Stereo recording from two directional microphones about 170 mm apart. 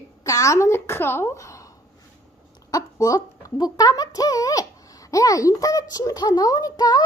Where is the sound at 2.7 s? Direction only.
20° left (ahead or behind).